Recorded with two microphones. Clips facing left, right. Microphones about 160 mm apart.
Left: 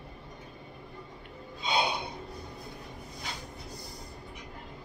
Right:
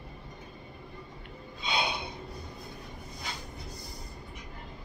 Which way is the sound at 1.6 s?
45° left (ahead or behind).